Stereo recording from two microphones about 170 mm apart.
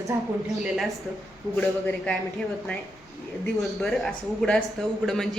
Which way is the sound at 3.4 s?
Centre (ahead or behind).